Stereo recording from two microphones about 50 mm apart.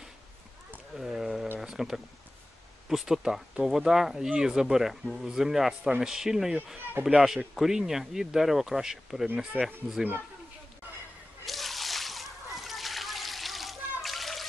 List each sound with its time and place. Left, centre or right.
0.9 s a sound: centre
2.9 s speech: centre
9.5 s speech: right
11.4 s splash: centre